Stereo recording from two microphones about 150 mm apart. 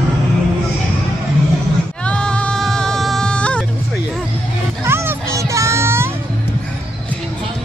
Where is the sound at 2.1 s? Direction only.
5° left (ahead or behind).